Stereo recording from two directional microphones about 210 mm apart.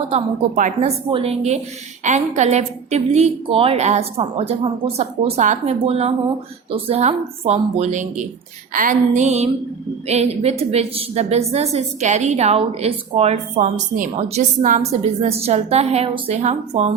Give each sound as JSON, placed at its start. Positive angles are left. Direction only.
{"t": 0.1, "sound": "a woman's voice", "side_deg": -35}